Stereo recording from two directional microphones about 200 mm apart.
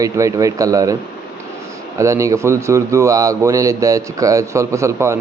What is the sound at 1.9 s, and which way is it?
A man's voice, 15° right (ahead or behind).